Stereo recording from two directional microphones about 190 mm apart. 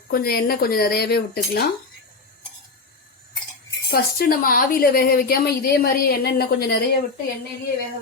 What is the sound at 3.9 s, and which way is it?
Speech, 50° left (ahead or behind).